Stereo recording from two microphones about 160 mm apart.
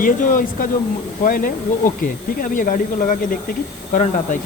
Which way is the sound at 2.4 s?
55° left (ahead or behind).